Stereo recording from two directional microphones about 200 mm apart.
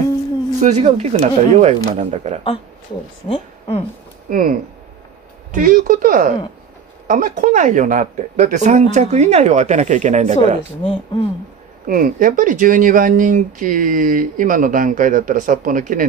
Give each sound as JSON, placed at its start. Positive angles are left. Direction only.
{"t": 0.6, "sound": "speech", "side_deg": -35}
{"t": 3.3, "sound": "a woman's voice", "side_deg": 30}
{"t": 4.3, "sound": "speech", "side_deg": -45}
{"t": 10.8, "sound": "speech", "side_deg": 25}
{"t": 11.8, "sound": "speech", "side_deg": -40}